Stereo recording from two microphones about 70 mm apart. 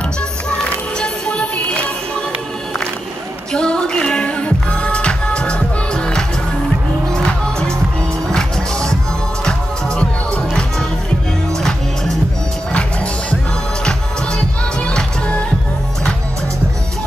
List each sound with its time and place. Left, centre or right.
0.5 s music: centre
3.5 s music: centre
14.9 s music: centre